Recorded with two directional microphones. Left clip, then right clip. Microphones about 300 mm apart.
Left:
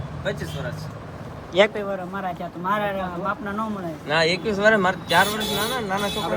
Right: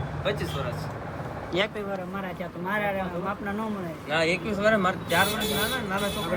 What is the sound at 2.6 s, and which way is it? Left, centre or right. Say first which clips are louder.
Speech: left 4 dB; centre.